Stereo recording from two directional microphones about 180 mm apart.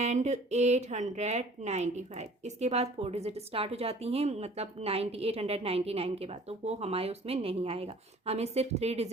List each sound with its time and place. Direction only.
0.0 s speech: 40° right (ahead or behind)